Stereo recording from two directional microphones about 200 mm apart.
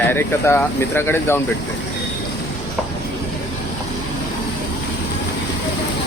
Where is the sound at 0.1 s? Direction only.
10° left (ahead or behind).